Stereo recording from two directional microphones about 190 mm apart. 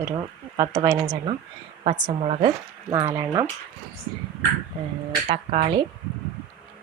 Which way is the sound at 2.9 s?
20° right (ahead or behind).